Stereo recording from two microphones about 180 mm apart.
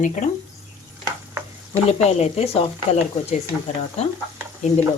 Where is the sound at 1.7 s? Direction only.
35° left (ahead or behind).